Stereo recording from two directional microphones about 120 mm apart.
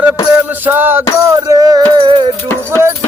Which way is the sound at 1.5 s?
30° right (ahead or behind).